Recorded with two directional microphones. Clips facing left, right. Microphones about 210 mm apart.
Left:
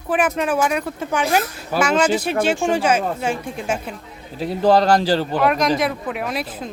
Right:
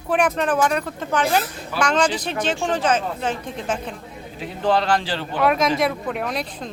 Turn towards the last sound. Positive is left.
turn(degrees=5)  # may be behind; listen again after turning